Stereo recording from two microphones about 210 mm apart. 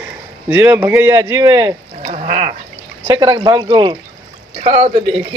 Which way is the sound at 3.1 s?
20° right (ahead or behind).